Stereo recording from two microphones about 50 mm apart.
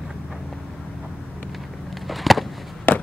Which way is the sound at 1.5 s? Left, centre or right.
Centre.